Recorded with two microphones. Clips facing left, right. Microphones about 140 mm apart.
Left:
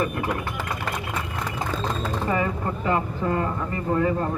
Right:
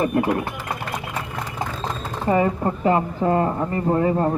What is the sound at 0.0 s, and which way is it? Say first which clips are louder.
Speech: right 6 dB; 30° right (ahead or behind).